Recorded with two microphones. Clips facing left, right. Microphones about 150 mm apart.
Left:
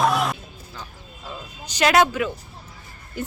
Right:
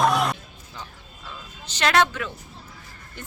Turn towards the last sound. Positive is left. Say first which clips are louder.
# left 10 dB
turn(degrees=10)  # may be behind; listen again after turning